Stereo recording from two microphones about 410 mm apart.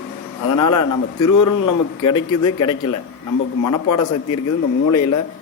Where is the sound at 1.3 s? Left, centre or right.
Left.